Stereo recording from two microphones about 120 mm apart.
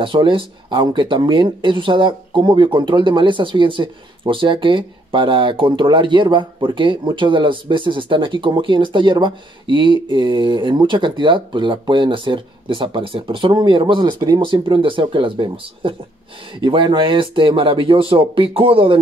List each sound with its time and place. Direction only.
0.0 s speech: 45° right (ahead or behind)